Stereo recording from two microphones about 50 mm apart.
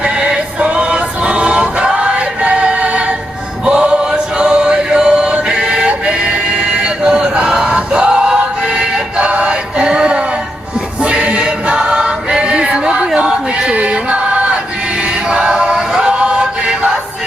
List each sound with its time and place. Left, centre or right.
0.0 s music: right
3.7 s choir: centre
5.5 s chant: centre
6.8 s a sound: centre
7.6 s music: centre
11.0 s choir: right